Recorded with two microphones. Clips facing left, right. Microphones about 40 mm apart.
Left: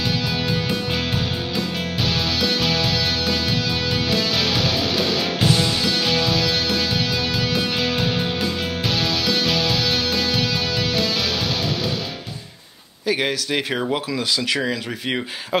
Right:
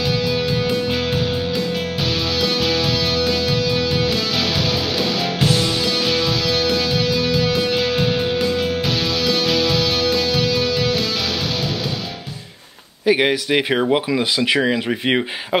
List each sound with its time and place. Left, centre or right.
3.7 s music: centre
7.2 s music: centre
13.0 s speech: centre